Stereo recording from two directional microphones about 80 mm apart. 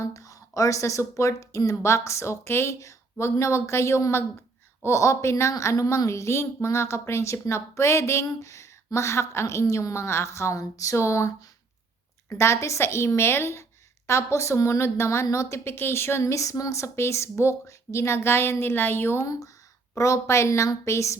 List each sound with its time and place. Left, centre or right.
0.0 s a woman's voice: left
19.3 s a woman's voice: left